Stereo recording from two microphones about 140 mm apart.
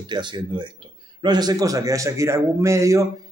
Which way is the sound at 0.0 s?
30° right (ahead or behind).